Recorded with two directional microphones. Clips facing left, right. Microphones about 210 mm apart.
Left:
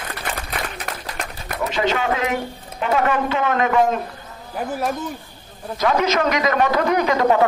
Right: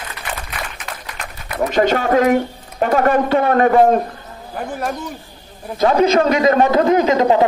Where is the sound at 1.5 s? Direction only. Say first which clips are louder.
Right 5 dB; 45° right (ahead or behind).